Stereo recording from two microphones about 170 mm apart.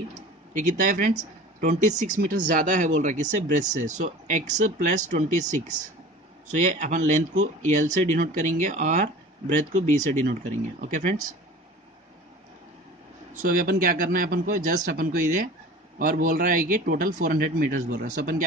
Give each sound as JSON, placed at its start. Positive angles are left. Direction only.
{"t": 0.6, "sound": "speech", "side_deg": -50}
{"t": 6.5, "sound": "speech", "side_deg": -45}
{"t": 13.4, "sound": "a man's voice", "side_deg": -55}